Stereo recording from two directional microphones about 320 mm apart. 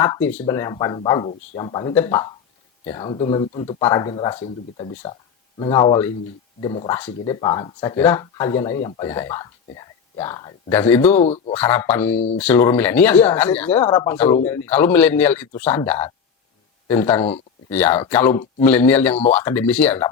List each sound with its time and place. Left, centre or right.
0.0 s speech: centre
11.2 s speech: centre
11.5 s speech: centre